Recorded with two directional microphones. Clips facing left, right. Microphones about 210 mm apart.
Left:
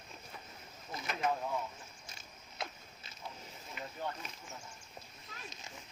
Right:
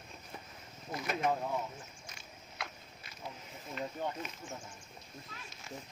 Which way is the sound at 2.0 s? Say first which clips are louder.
Right 2 dB; 30° left (ahead or behind).